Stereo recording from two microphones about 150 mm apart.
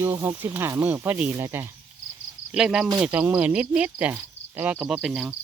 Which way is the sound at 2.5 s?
5° right (ahead or behind).